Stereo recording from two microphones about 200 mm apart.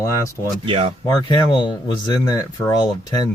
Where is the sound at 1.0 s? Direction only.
20° left (ahead or behind).